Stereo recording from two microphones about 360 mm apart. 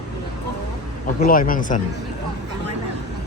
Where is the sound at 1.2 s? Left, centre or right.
Left.